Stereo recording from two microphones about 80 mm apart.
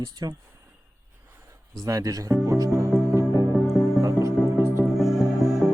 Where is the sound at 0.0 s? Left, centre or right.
Right.